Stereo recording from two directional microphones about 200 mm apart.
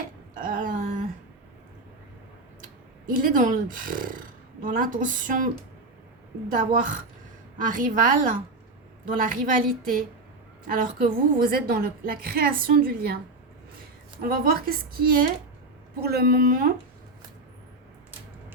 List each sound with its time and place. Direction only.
0.3 s a sound: 40° right (ahead or behind)
3.1 s a woman's voice: 45° right (ahead or behind)
6.5 s a woman's voice: 40° right (ahead or behind)
14.2 s a woman's voice: 45° right (ahead or behind)